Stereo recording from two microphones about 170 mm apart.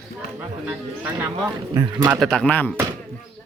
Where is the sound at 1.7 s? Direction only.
20° right (ahead or behind).